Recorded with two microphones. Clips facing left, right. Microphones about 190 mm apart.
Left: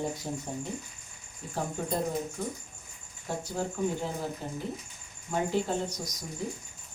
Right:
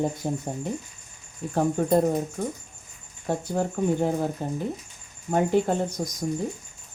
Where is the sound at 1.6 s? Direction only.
55° right (ahead or behind).